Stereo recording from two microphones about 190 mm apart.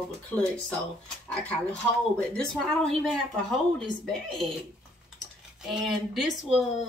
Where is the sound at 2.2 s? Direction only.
5° left (ahead or behind).